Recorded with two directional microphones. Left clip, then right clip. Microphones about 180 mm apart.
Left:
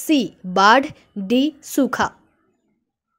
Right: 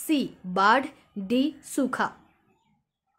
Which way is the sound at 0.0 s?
35° left (ahead or behind).